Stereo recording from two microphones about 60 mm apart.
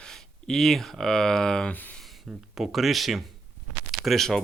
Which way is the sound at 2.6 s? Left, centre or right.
Centre.